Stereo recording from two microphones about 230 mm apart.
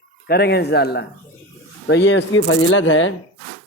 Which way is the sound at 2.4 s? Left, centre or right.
Left.